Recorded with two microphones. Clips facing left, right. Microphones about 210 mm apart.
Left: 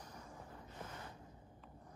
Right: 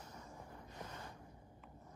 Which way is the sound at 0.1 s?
25° right (ahead or behind).